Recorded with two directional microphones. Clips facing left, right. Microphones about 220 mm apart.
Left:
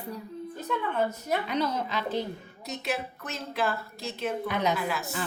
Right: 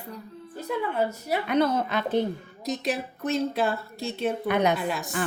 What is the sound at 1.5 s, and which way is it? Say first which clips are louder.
Speech: right 6 dB; 55° right (ahead or behind).